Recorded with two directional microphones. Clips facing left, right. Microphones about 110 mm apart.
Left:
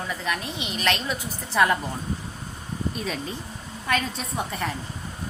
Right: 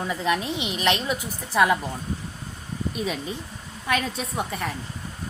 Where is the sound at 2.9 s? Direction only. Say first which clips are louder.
Right 2 dB; 10° right (ahead or behind).